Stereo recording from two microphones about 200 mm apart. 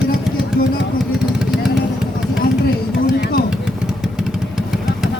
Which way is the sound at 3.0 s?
45° left (ahead or behind).